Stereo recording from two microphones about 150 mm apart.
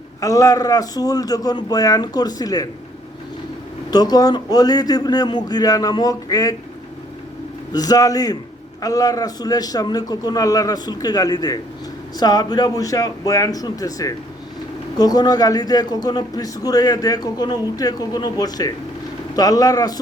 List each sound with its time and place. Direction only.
0.2 s a man's voice: 25° left (ahead or behind)
3.9 s a man's voice: 25° left (ahead or behind)
7.7 s a man's voice: 25° left (ahead or behind)